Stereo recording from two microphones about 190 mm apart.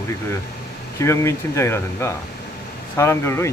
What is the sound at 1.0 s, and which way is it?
Speech, 15° left (ahead or behind).